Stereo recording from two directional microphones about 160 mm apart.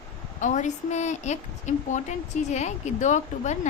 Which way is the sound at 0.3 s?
50° left (ahead or behind).